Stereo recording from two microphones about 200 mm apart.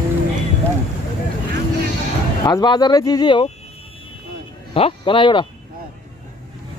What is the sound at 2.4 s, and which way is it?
Speech, 20° left (ahead or behind).